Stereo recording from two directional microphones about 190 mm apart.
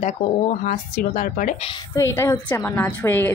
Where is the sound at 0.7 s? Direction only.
40° left (ahead or behind).